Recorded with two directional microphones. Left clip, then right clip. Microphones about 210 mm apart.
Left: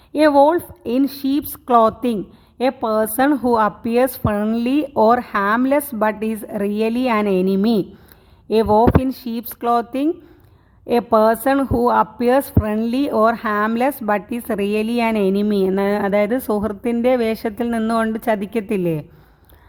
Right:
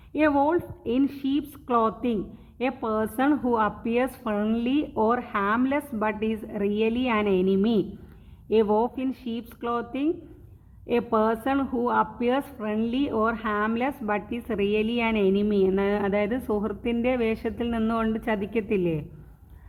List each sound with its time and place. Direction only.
0.1 s a woman's voice: 55° left (ahead or behind)